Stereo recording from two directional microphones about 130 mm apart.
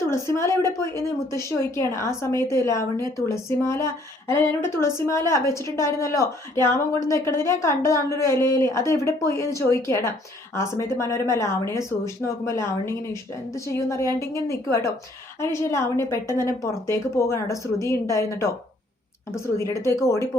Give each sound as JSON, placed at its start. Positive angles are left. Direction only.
{"t": 0.1, "sound": "a woman's voice", "side_deg": 20}